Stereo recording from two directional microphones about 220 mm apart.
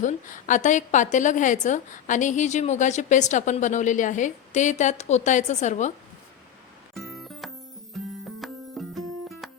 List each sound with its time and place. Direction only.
0.0 s a woman's voice: 35° left (ahead or behind)
6.9 s music: centre (ahead or behind)